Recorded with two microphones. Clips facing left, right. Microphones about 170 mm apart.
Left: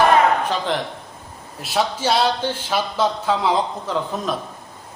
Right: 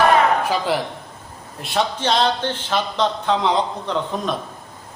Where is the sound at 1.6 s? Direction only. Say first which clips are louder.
Even; 5° left (ahead or behind).